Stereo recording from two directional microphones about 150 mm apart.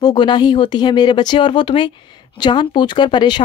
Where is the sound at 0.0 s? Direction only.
30° left (ahead or behind).